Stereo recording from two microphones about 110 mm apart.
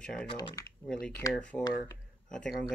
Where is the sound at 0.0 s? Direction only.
10° left (ahead or behind).